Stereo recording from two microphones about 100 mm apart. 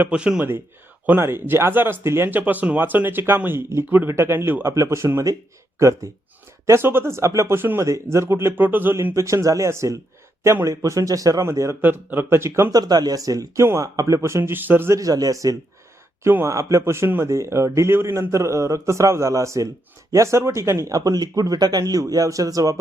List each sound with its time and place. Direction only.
0.0 s speech: 10° right (ahead or behind)
1.0 s speech: 25° right (ahead or behind)
12.7 s speech: 40° right (ahead or behind); by 14.9 s 20° right (ahead or behind)
14.9 s speech: 35° right (ahead or behind)
16.2 s speech: 25° right (ahead or behind)